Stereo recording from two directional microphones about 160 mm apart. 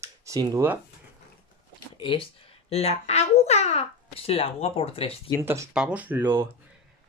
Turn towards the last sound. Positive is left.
turn(degrees=-15)  # may be behind; listen again after turning